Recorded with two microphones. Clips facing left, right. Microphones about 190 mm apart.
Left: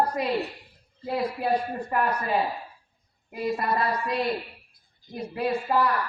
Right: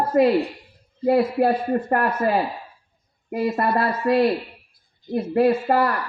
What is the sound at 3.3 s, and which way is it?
A man's voice, 55° right (ahead or behind).